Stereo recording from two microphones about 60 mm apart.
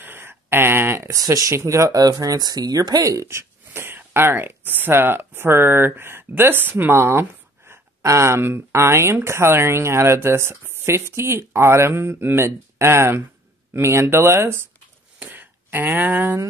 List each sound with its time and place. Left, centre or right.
0.0 s a sound: right
1.1 s speech: right
1.5 s speech: right
3.3 s speech: right
8.0 s speech: right
15.1 s a sound: right